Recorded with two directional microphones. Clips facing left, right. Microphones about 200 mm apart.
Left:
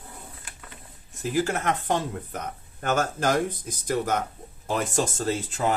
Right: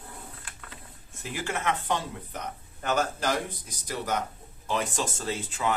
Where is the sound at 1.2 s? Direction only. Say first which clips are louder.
Left 7 dB; 40° left (ahead or behind).